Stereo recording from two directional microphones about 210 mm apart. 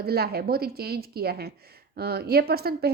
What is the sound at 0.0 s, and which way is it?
A woman's voice, 50° right (ahead or behind).